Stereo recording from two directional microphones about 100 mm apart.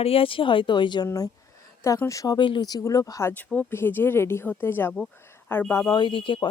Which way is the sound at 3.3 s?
15° left (ahead or behind).